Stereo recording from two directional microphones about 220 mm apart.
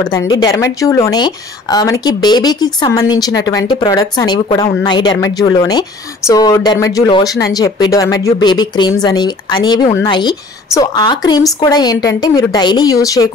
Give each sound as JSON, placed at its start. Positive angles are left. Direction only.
{"t": 0.0, "sound": "a woman's voice", "side_deg": 15}